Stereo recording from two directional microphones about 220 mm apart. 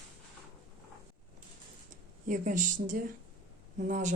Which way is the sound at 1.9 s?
35° right (ahead or behind).